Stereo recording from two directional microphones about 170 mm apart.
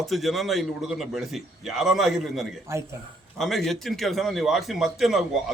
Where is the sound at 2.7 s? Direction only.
15° right (ahead or behind).